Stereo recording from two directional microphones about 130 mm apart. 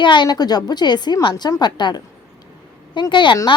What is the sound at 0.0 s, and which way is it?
A woman's voice, 35° left (ahead or behind).